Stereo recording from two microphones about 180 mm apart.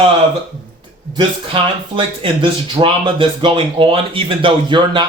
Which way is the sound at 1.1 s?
30° right (ahead or behind).